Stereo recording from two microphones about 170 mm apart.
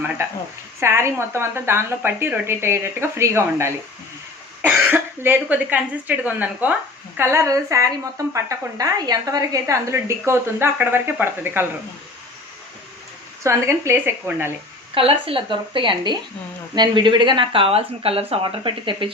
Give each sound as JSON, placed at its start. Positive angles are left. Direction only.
{"t": 0.8, "sound": "speech", "side_deg": -15}
{"t": 13.4, "sound": "speech", "side_deg": -15}
{"t": 14.9, "sound": "speech", "side_deg": -30}